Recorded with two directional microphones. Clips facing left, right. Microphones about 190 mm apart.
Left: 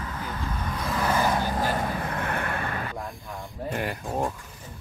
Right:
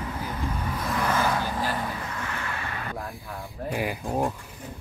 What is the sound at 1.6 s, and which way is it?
Vehicle, 45° left (ahead or behind).